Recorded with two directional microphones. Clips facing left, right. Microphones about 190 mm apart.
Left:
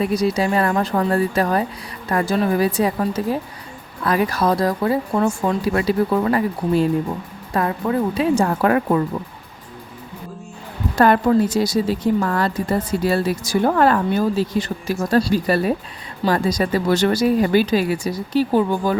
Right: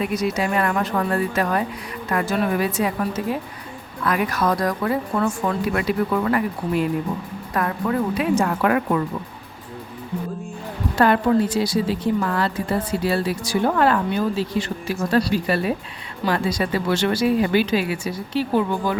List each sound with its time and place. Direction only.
0.0 s speech: 35° left (ahead or behind)
10.9 s speech: 45° left (ahead or behind)